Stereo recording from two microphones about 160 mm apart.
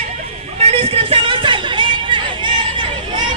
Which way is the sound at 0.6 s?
35° right (ahead or behind).